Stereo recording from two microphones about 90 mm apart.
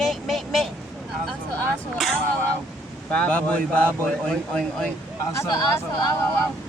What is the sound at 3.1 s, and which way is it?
A man's voice, 15° left (ahead or behind).